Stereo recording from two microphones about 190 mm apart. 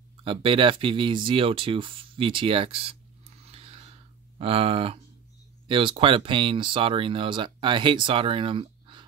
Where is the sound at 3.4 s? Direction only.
30° right (ahead or behind).